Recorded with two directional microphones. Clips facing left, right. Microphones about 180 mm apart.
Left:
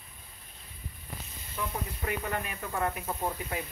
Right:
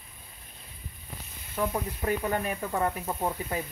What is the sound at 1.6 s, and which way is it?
Speech, 40° right (ahead or behind).